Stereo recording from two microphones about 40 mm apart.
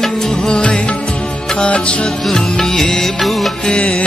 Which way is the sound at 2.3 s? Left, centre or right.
Centre.